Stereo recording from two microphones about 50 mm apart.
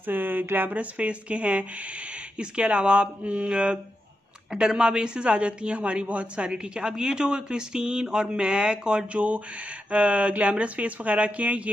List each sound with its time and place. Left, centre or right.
0.0 s speech: right
0.7 s speech: right